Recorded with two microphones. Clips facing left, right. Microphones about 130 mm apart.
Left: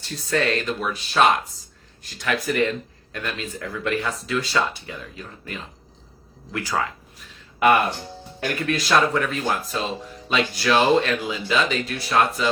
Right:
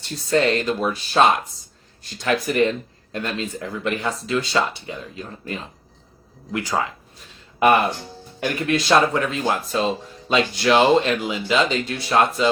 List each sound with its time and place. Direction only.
0.3 s speech: 25° right (ahead or behind)